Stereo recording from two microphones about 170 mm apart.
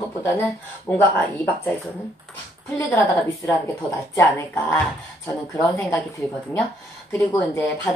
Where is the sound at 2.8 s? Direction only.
10° left (ahead or behind).